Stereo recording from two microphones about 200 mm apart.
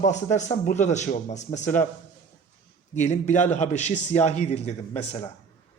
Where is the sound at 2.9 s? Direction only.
35° left (ahead or behind).